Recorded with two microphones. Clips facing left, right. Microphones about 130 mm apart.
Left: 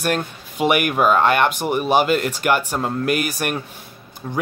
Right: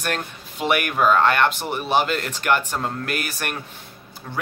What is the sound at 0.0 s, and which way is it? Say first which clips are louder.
Speech: left 5 dB; 10° left (ahead or behind).